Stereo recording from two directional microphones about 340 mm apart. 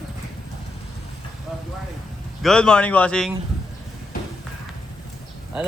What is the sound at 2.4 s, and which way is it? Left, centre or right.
Speech, centre.